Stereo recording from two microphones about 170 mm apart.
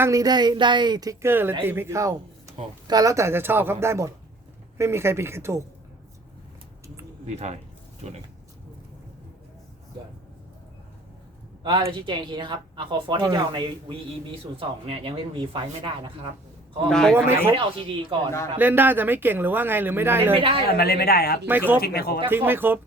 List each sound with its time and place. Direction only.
0.0 s speech: 20° right (ahead or behind)
7.3 s speech: 40° right (ahead or behind)
11.6 s speech: 30° right (ahead or behind)
16.9 s speech: 5° left (ahead or behind)
17.2 s speech: 15° right (ahead or behind)
17.5 s speech: 30° right (ahead or behind)
18.5 s speech: 10° right (ahead or behind)
20.3 s speech: 30° right (ahead or behind)
20.7 s speech: 65° left (ahead or behind)
21.4 s speech: 10° right (ahead or behind)
21.8 s speech: 65° left (ahead or behind)
22.3 s speech: 10° right (ahead or behind)